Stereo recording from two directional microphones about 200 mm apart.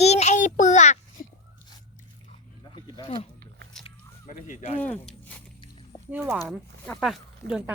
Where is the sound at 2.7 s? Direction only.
20° left (ahead or behind).